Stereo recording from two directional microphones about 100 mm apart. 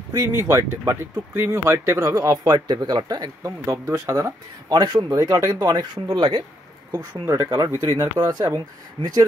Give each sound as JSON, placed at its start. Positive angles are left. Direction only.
{"t": 0.1, "sound": "speech", "side_deg": -30}
{"t": 3.4, "sound": "speech", "side_deg": -30}
{"t": 5.1, "sound": "speech", "side_deg": -30}
{"t": 7.0, "sound": "speech", "side_deg": -40}